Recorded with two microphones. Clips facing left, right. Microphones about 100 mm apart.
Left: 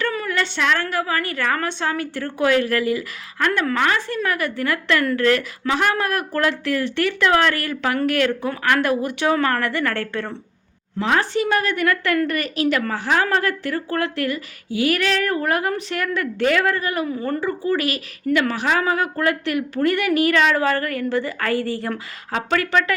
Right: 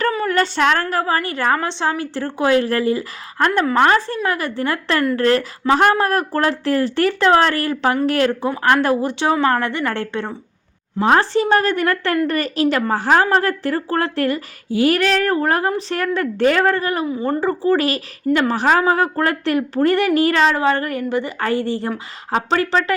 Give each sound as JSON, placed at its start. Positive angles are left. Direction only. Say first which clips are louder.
{"t": 0.3, "sound": "a woman's voice", "louder": "right 5 dB", "side_deg": -40}
{"t": 11.0, "sound": "a woman's voice", "louder": "right 5 dB", "side_deg": -35}
{"t": 17.1, "sound": "speech", "louder": "right 4 dB", "side_deg": -20}
{"t": 17.4, "sound": "a woman's voice", "louder": "right 6 dB", "side_deg": -35}